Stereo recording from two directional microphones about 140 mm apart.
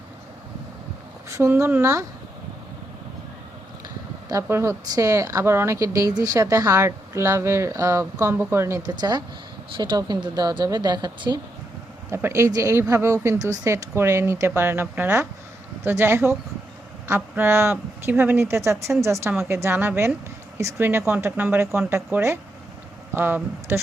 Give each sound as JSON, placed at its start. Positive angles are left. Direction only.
{"t": 1.3, "sound": "speech", "side_deg": -20}
{"t": 3.8, "sound": "speech", "side_deg": -25}
{"t": 8.9, "sound": "a woman's voice", "side_deg": -30}
{"t": 12.1, "sound": "speech", "side_deg": -20}